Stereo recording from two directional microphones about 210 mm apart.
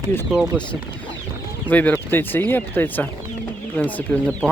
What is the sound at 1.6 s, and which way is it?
Speech, 10° left (ahead or behind).